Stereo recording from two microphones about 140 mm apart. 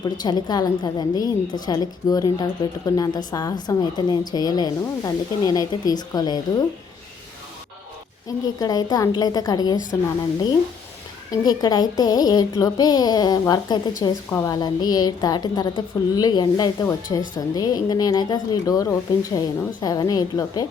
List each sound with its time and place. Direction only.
0.0 s a woman's voice: 30° left (ahead or behind)
8.5 s a woman's voice: 25° left (ahead or behind)
11.3 s a woman's voice: 30° left (ahead or behind)